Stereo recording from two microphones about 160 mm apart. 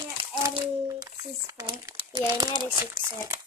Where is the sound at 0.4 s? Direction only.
20° right (ahead or behind).